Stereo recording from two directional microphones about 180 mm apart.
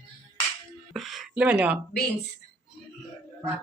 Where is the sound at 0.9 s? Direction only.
Centre (ahead or behind).